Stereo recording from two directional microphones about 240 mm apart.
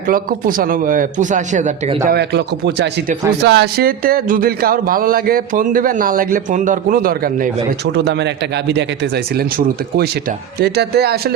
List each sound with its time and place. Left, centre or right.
0.1 s speech: right
2.0 s speech: right